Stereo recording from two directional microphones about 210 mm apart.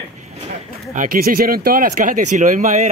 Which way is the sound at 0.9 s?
40° right (ahead or behind).